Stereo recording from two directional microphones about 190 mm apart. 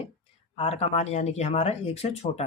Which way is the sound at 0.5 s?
35° left (ahead or behind).